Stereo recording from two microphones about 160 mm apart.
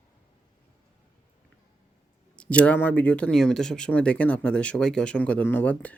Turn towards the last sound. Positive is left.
turn(degrees=10)  # may be behind; listen again after turning